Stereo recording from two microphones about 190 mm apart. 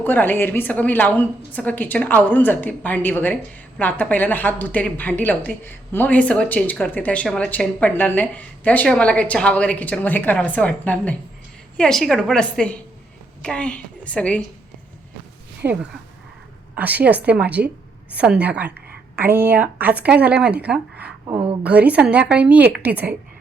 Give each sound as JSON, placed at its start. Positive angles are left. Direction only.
{"t": 0.0, "sound": "a woman's voice", "side_deg": 10}
{"t": 15.6, "sound": "speech", "side_deg": -10}
{"t": 21.2, "sound": "a woman's voice", "side_deg": -20}
{"t": 21.6, "sound": "speech", "side_deg": -5}